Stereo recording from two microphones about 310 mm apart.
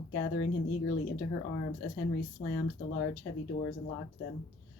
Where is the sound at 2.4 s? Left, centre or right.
Left.